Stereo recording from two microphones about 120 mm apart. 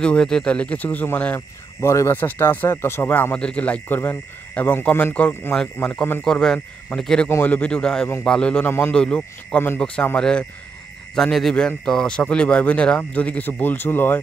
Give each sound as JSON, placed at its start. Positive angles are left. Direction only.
{"t": 0.0, "sound": "speech", "side_deg": 5}
{"t": 7.2, "sound": "speech", "side_deg": 15}